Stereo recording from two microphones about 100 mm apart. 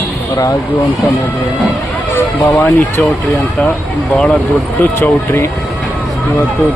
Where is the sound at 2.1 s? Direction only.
35° left (ahead or behind).